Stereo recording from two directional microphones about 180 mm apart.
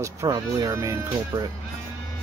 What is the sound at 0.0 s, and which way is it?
Speech, 20° right (ahead or behind).